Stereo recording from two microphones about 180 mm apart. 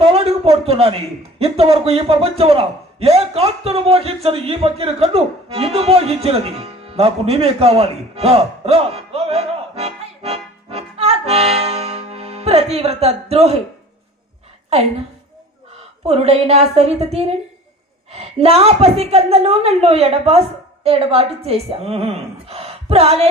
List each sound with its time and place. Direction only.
0.0 s a sound: 35° right (ahead or behind)
1.4 s a man's voice: 35° right (ahead or behind)
16.0 s speech: 35° right (ahead or behind)